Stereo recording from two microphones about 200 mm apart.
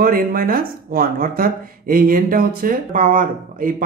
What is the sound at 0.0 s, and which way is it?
Speech, 45° right (ahead or behind).